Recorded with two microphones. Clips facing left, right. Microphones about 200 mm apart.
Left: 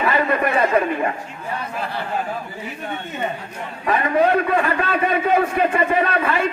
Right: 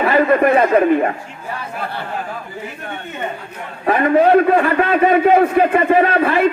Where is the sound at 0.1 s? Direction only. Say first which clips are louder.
Right 9 dB; 50° right (ahead or behind).